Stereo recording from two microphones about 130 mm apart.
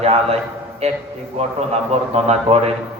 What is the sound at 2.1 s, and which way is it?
Speech, 55° right (ahead or behind).